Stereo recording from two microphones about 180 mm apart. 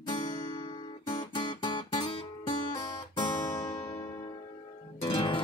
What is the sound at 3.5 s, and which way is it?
Music, 15° left (ahead or behind).